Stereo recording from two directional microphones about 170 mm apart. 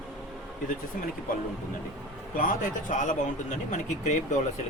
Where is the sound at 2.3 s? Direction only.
50° left (ahead or behind).